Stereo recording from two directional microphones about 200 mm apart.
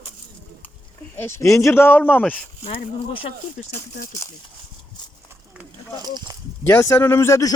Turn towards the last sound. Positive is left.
turn(degrees=15)  # may be behind; listen again after turning